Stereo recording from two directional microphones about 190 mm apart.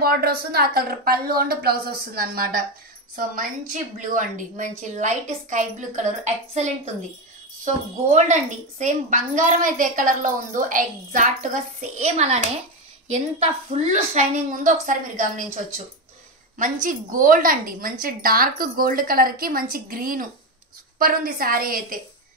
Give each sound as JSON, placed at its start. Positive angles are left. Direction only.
{"t": 0.0, "sound": "a woman's voice", "side_deg": -55}